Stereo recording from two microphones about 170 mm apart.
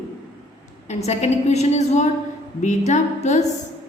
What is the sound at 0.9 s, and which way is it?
A woman's voice, 40° left (ahead or behind).